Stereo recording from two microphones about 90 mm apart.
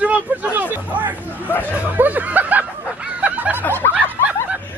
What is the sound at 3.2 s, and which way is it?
Snicker, 20° right (ahead or behind).